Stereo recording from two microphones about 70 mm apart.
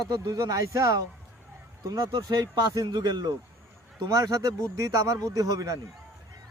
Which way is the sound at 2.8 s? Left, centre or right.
Right.